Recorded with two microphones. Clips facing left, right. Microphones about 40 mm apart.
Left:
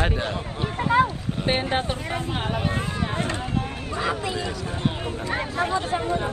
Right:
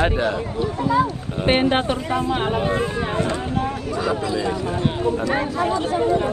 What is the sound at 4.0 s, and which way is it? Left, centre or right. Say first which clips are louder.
Speech: right 3 dB; left.